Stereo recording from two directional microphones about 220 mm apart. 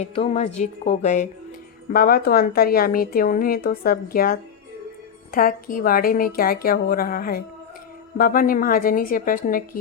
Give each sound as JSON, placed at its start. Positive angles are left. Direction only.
{"t": 0.0, "sound": "a woman's voice", "side_deg": 30}